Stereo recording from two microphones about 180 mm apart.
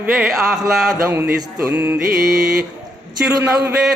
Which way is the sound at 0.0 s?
5° right (ahead or behind).